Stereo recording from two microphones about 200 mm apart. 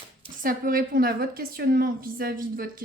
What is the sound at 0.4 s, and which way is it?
A woman's voice, 45° right (ahead or behind).